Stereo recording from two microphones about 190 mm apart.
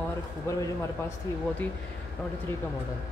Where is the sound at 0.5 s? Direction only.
15° left (ahead or behind).